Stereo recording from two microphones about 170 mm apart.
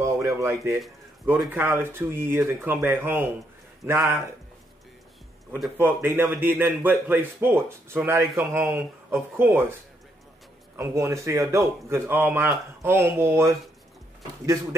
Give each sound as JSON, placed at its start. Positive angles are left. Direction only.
{"t": 0.0, "sound": "speech", "side_deg": -20}
{"t": 0.8, "sound": "speech", "side_deg": -5}
{"t": 5.8, "sound": "speech", "side_deg": -10}
{"t": 10.8, "sound": "a man's voice", "side_deg": -15}